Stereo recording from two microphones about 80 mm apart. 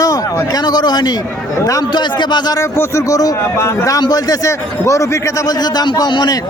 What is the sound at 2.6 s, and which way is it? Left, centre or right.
A man's voice, left.